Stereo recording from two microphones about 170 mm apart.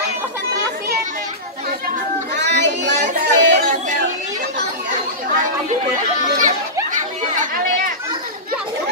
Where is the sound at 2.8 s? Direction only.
90° right.